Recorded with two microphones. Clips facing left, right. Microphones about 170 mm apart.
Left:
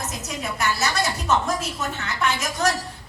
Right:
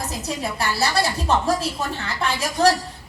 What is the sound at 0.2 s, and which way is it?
A woman's voice, 30° right (ahead or behind).